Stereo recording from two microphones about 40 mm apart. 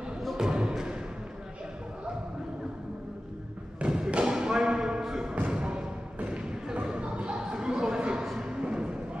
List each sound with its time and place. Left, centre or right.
0.4 s thump: centre
3.8 s thump: centre
4.1 s basketball bounce: right
5.3 s basketball bounce: right
6.2 s a sound: right